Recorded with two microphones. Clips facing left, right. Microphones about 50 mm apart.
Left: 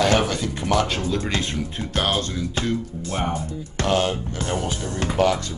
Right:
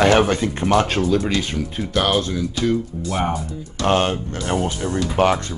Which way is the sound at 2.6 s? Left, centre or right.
Left.